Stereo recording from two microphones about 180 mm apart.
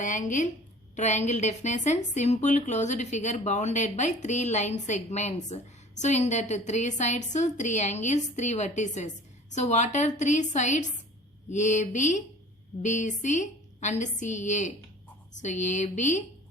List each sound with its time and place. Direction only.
0.0 s a woman's voice: 45° left (ahead or behind)